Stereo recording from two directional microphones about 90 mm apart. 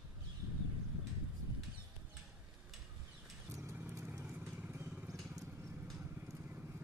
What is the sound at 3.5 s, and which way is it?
Horse, 25° right (ahead or behind).